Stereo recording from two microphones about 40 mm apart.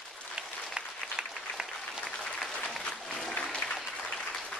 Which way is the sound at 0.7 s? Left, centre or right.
Centre.